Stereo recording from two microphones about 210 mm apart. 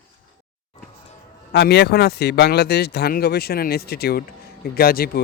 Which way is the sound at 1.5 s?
50° left (ahead or behind).